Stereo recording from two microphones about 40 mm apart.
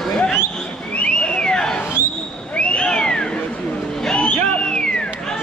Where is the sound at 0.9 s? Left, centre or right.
Left.